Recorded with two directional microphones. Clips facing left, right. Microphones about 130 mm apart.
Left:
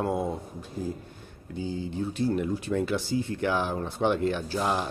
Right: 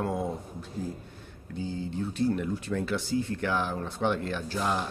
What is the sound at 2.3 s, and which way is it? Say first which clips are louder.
Speech: left 3 dB; 15° left (ahead or behind).